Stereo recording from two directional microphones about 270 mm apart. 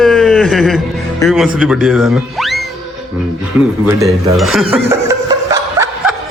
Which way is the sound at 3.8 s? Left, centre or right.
Centre.